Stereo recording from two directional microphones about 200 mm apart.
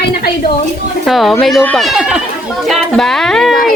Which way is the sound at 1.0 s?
Centre (ahead or behind).